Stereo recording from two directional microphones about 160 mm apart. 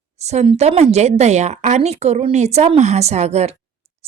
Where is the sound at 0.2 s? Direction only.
45° right (ahead or behind).